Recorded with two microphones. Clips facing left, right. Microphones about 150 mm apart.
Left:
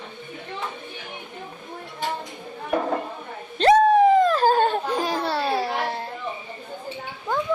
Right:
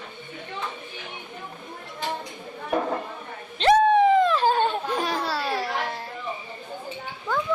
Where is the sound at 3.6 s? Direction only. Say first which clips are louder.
Left 2 dB; 40° left (ahead or behind).